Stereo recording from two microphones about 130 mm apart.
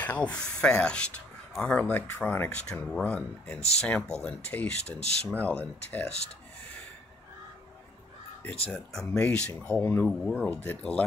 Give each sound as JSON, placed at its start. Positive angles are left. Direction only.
{"t": 0.0, "sound": "speech", "side_deg": 10}
{"t": 6.0, "sound": "speech", "side_deg": 55}
{"t": 8.6, "sound": "speech", "side_deg": 5}